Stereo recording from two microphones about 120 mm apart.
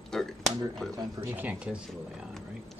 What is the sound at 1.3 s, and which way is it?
Speech, 10° right (ahead or behind).